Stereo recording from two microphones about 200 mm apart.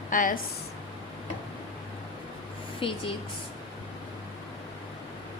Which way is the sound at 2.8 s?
25° left (ahead or behind).